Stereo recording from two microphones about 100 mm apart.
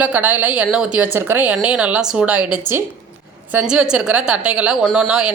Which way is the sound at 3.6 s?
5° right (ahead or behind).